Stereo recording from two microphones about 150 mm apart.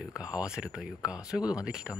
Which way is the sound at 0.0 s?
5° right (ahead or behind).